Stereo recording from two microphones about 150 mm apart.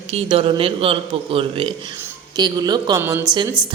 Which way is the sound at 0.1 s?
40° right (ahead or behind).